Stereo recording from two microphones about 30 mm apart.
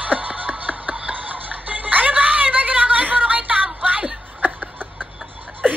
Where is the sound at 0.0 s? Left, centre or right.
Right.